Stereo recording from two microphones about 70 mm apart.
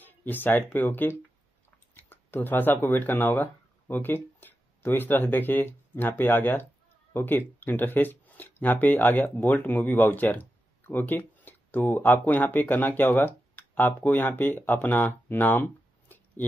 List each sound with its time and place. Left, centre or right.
0.0 s speech: left